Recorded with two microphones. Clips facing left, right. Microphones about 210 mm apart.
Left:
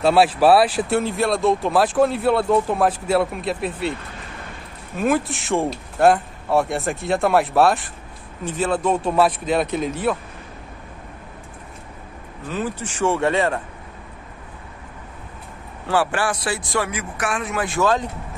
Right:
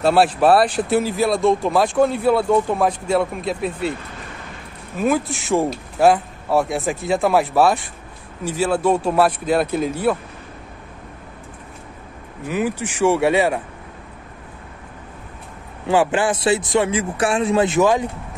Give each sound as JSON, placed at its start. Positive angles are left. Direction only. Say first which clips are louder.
{"t": 0.0, "sound": "speech", "louder": "even", "side_deg": 0}
{"t": 4.9, "sound": "speech", "louder": "right 1 dB", "side_deg": 0}
{"t": 12.4, "sound": "speech", "louder": "right 4 dB", "side_deg": -10}
{"t": 15.9, "sound": "speech", "louder": "right 4 dB", "side_deg": -20}